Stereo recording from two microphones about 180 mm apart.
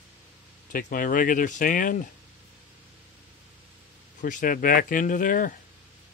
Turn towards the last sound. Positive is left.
turn(degrees=50)  # may be behind; listen again after turning